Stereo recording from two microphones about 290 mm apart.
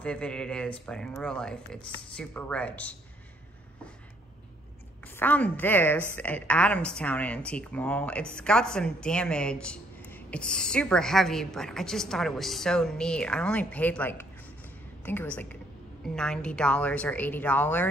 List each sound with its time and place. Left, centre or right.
0.0 s a woman's voice: centre
5.0 s a woman's voice: centre